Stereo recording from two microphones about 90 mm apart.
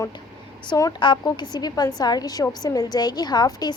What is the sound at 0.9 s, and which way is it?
A woman's voice, 55° left (ahead or behind).